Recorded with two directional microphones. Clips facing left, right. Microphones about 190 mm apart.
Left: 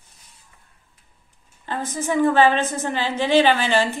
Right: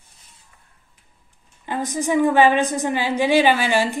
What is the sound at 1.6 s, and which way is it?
A woman's voice, 15° right (ahead or behind).